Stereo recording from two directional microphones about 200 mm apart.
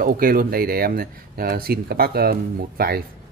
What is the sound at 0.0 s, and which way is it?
Speech, 45° right (ahead or behind).